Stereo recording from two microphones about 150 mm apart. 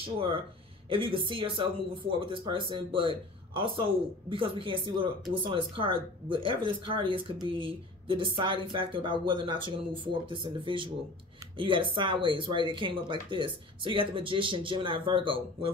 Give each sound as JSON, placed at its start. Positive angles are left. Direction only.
{"t": 0.0, "sound": "speech", "side_deg": -35}